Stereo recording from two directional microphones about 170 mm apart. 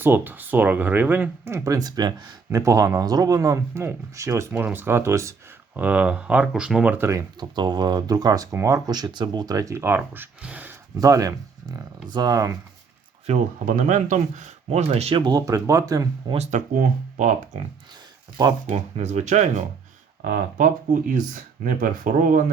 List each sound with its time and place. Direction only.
0.0 s speech: 10° right (ahead or behind)
7.3 s speech: 25° right (ahead or behind); by 10.8 s 10° right (ahead or behind)
10.9 s speech: 20° right (ahead or behind)
13.2 s speech: 45° right (ahead or behind); by 16.0 s 20° right (ahead or behind)
16.3 s speech: 45° right (ahead or behind)
18.6 s speech: 40° right (ahead or behind)